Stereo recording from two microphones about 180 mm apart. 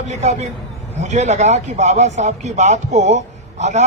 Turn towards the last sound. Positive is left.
turn(degrees=-40)  # may be behind; listen again after turning